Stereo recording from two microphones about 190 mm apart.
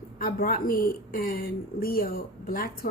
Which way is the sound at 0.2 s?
50° left (ahead or behind).